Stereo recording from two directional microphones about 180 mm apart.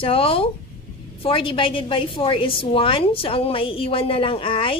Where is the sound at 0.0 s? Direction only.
30° left (ahead or behind).